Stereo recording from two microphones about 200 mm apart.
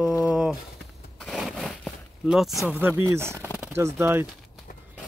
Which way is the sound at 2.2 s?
Centre (ahead or behind).